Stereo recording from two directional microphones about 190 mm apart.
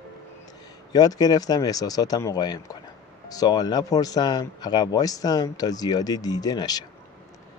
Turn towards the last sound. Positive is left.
turn(degrees=20)  # may be behind; listen again after turning